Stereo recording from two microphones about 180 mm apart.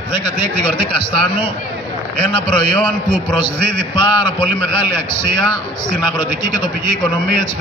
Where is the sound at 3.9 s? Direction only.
30° left (ahead or behind).